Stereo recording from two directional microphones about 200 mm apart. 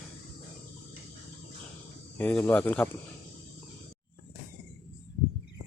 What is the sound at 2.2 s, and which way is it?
Speech, 10° left (ahead or behind).